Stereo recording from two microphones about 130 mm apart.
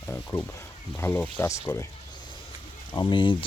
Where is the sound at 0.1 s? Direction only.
15° left (ahead or behind).